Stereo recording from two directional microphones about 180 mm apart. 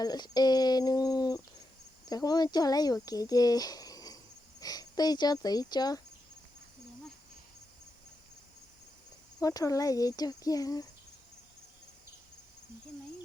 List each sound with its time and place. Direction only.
0.0 s speech: 20° left (ahead or behind)
9.4 s speech: 20° left (ahead or behind)